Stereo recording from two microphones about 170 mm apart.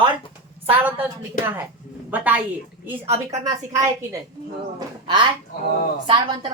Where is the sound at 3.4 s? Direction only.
20° right (ahead or behind).